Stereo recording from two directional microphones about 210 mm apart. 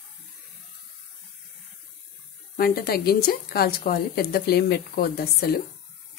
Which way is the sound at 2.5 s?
45° left (ahead or behind).